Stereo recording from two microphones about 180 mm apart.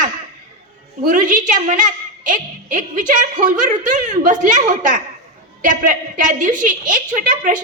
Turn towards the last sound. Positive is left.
turn(degrees=-45)  # may be behind; listen again after turning